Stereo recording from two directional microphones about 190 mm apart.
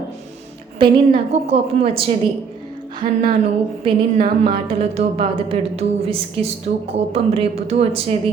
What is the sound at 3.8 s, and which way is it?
A woman's voice, 30° right (ahead or behind).